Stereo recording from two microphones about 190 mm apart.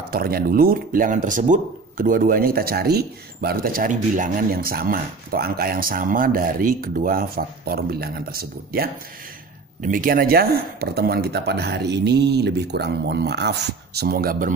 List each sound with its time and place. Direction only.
0.1 s speech: 50° right (ahead or behind)